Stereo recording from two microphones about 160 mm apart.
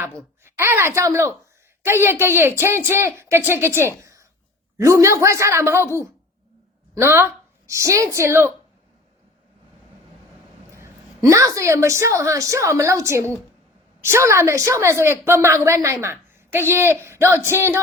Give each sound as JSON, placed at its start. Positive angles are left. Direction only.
{"t": 0.4, "sound": "a woman's voice", "side_deg": -15}
{"t": 10.7, "sound": "a woman's voice", "side_deg": -15}